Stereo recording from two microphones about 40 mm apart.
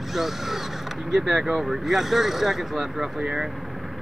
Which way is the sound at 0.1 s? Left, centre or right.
Centre.